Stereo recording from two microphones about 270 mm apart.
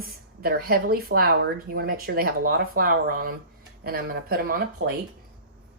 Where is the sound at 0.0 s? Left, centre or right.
Right.